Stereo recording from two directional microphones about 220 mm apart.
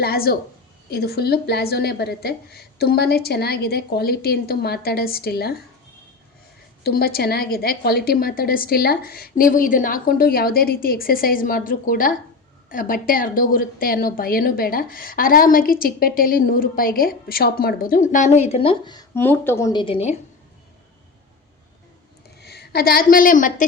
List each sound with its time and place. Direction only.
0.0 s a woman's voice: 45° left (ahead or behind)
6.8 s a woman's voice: 45° left (ahead or behind); by 20.1 s 25° left (ahead or behind)
22.4 s a woman's voice: 45° left (ahead or behind)